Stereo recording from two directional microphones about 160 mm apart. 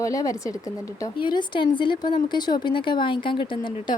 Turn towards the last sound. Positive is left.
turn(degrees=30)  # may be behind; listen again after turning